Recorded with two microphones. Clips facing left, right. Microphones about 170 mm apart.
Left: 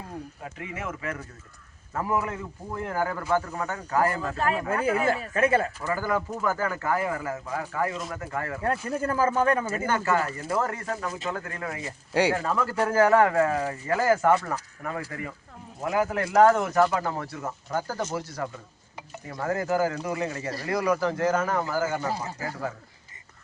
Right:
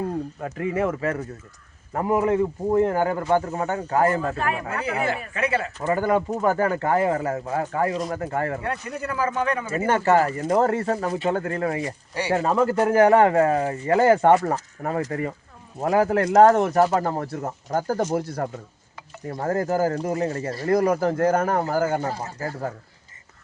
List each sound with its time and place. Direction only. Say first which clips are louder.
0.4 s speech: right 12 dB; 45° right (ahead or behind); by 2.3 s 25° right (ahead or behind)
2.3 s speech: right 15 dB; 50° right (ahead or behind)
2.7 s speech: right 8 dB; 25° right (ahead or behind)
4.4 s speech: even; 35° left (ahead or behind)
4.8 s speech: left 1 dB; 45° left (ahead or behind)
5.8 s speech: right 6 dB; 25° right (ahead or behind)
8.6 s speech: left 2 dB; 30° left (ahead or behind)
9.0 s speech: left 1 dB; 45° left (ahead or behind)
9.7 s speech: right 6 dB; 30° right (ahead or behind); by 18.5 s 55° right (ahead or behind)
19.3 s speech: right 3 dB; 40° right (ahead or behind)